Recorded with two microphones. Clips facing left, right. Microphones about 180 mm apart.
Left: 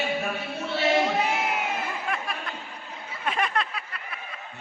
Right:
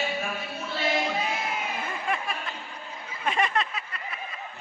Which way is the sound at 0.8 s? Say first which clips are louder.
Left 4 dB; 70° left (ahead or behind).